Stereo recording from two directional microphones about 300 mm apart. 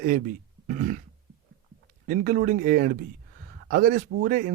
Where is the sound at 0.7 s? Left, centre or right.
Right.